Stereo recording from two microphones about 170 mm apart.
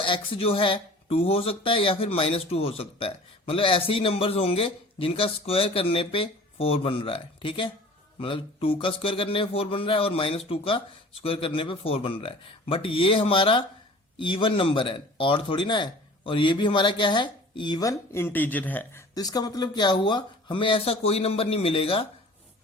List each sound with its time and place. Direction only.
0.0 s speech: 30° left (ahead or behind); by 19.0 s 10° left (ahead or behind)
19.1 s speech: 20° left (ahead or behind)